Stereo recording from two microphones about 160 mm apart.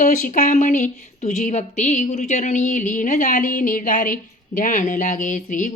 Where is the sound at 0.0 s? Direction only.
55° left (ahead or behind).